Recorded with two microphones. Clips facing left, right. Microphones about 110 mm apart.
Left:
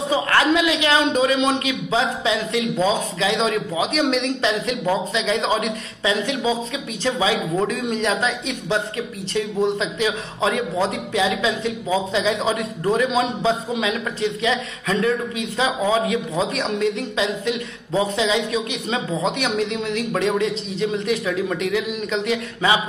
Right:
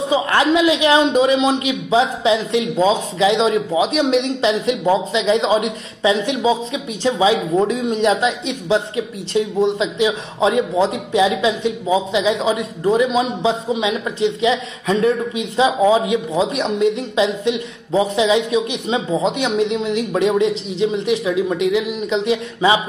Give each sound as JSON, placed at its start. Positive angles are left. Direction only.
{"t": 0.1, "sound": "a man's voice", "side_deg": -20}
{"t": 9.9, "sound": "a man's voice", "side_deg": -20}